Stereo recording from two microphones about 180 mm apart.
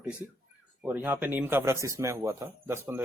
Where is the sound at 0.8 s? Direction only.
10° right (ahead or behind).